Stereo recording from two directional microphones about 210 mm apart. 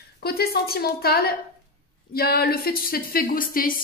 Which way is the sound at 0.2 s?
45° left (ahead or behind).